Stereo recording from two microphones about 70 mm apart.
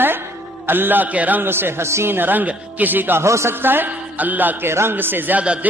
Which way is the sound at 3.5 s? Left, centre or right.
Right.